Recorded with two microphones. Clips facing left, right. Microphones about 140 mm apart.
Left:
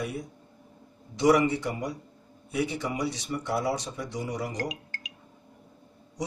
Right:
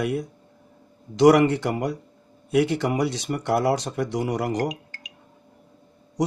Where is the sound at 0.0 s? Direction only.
80° right.